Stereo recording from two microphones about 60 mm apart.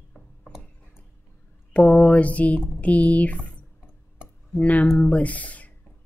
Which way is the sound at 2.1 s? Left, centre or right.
Left.